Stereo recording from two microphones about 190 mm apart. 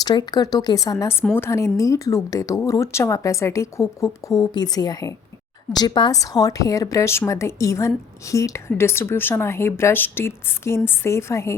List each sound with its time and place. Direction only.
0.0 s a woman's voice: 20° left (ahead or behind)